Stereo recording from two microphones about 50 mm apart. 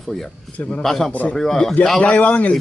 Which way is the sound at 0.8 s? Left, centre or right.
Centre.